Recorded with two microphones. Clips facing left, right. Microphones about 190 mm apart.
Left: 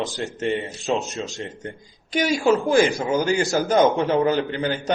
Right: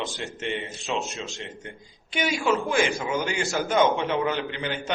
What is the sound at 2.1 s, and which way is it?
A man's voice, 40° left (ahead or behind).